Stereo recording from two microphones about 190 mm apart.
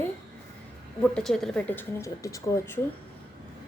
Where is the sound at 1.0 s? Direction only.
5° left (ahead or behind).